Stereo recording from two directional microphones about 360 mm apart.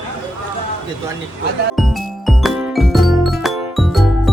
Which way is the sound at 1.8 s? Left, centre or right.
Centre.